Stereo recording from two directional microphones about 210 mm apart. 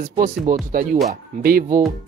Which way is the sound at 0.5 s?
40° right (ahead or behind).